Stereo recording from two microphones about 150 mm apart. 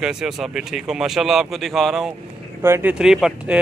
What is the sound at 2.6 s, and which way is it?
Speech, 15° right (ahead or behind).